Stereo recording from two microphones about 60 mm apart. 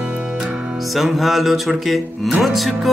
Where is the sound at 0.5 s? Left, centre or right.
Centre.